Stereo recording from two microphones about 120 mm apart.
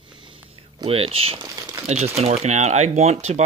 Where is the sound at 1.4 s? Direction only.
30° right (ahead or behind).